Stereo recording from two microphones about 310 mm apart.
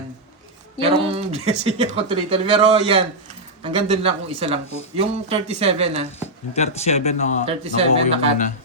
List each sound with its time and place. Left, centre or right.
0.8 s speech: centre
6.1 s speech: left
7.4 s speech: centre